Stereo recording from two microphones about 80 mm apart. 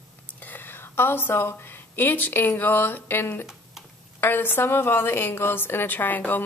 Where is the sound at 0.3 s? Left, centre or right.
Left.